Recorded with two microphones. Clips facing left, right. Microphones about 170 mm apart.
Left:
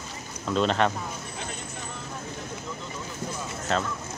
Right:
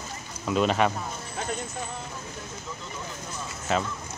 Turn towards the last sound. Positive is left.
turn(degrees=-5)  # may be behind; listen again after turning